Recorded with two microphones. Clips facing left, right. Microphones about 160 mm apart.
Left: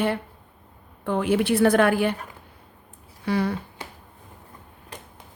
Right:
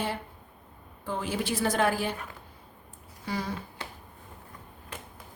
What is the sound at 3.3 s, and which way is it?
Speech, 65° left (ahead or behind).